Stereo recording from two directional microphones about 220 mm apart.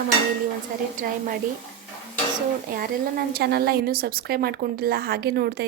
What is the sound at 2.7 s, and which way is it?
A woman's voice, 45° right (ahead or behind).